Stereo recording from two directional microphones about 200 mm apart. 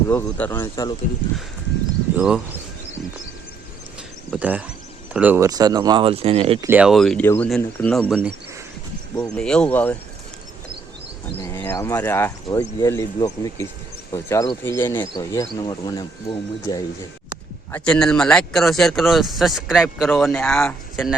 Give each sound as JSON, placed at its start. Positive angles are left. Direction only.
{"t": 0.1, "sound": "speech", "side_deg": 10}
{"t": 2.1, "sound": "a man's voice", "side_deg": -5}
{"t": 4.3, "sound": "speech", "side_deg": -5}
{"t": 6.7, "sound": "a man's voice", "side_deg": -5}
{"t": 9.3, "sound": "a man's voice", "side_deg": 5}
{"t": 11.3, "sound": "speech", "side_deg": 10}
{"t": 17.7, "sound": "a man's voice", "side_deg": 5}